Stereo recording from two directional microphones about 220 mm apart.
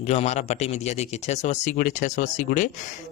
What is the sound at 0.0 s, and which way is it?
Speech, 30° left (ahead or behind).